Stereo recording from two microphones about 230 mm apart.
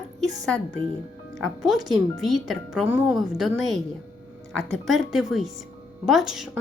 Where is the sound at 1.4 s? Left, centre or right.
Centre.